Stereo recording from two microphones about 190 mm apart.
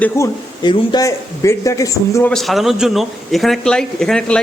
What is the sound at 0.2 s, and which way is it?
A man's voice, 15° left (ahead or behind).